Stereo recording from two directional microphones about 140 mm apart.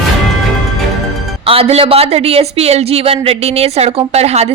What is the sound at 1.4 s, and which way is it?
A woman's voice, 45° right (ahead or behind).